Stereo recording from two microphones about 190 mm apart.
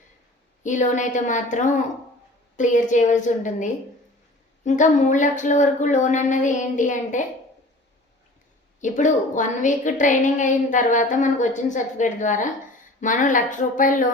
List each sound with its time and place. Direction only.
0.6 s a woman's voice: 40° left (ahead or behind)
8.8 s a woman's voice: 40° left (ahead or behind)